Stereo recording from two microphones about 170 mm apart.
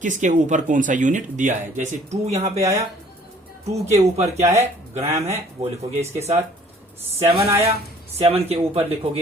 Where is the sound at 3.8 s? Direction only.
40° right (ahead or behind).